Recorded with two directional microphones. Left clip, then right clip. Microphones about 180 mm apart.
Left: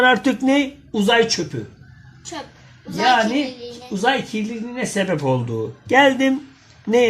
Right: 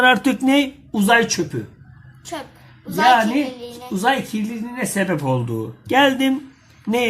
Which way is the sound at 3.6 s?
30° right (ahead or behind).